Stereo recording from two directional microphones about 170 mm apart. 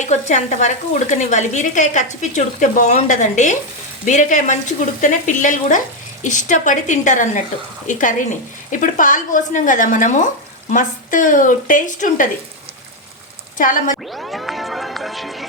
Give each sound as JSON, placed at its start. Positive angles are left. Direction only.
{"t": 0.0, "sound": "speech", "side_deg": 45}
{"t": 13.6, "sound": "speech", "side_deg": 50}
{"t": 14.1, "sound": "music", "side_deg": 0}